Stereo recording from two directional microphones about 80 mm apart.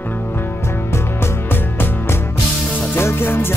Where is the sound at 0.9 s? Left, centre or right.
Left.